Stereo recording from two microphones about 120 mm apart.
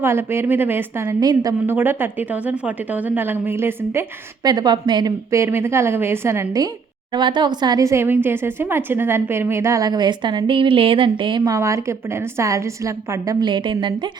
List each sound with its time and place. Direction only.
0.0 s a woman's voice: 20° right (ahead or behind)
1.0 s speech: 30° right (ahead or behind)
1.6 s a woman's voice: 15° right (ahead or behind)
4.4 s speech: 35° right (ahead or behind)
5.3 s a woman's voice: 20° right (ahead or behind)
7.1 s speech: 40° right (ahead or behind)
11.4 s a woman's voice: 25° right (ahead or behind)
13.4 s speech: 40° right (ahead or behind)